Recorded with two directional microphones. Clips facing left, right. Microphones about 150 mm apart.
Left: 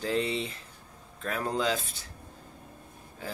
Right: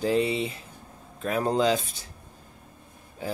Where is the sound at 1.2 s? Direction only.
20° right (ahead or behind).